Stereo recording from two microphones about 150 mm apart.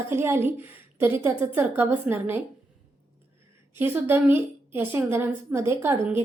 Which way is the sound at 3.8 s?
15° right (ahead or behind).